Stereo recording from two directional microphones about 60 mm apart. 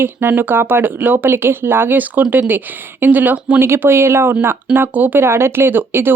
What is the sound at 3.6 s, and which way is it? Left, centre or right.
A woman's voice, right.